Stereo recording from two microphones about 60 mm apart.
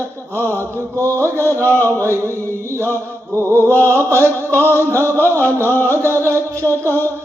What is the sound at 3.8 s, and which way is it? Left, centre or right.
Mantra, right.